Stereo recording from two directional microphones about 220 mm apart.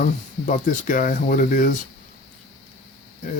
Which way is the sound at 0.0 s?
35° left (ahead or behind).